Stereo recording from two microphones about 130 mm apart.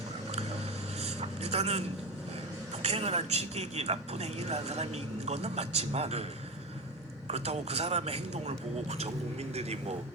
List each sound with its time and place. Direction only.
1.0 s vehicle: 55° right (ahead or behind)
2.8 s a man's voice: 55° right (ahead or behind)
7.3 s a man's voice: 55° right (ahead or behind)